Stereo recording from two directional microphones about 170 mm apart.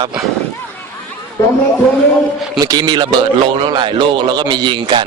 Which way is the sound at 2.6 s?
25° right (ahead or behind).